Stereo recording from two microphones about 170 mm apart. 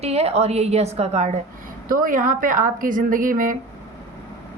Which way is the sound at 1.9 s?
55° right (ahead or behind).